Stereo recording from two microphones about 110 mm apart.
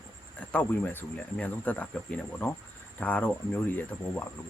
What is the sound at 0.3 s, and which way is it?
Speech, 15° left (ahead or behind).